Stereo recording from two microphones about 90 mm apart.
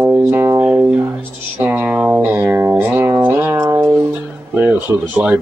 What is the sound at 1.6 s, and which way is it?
Music, 20° right (ahead or behind).